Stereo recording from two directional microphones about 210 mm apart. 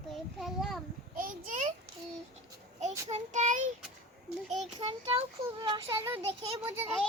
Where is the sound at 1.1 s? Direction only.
40° right (ahead or behind).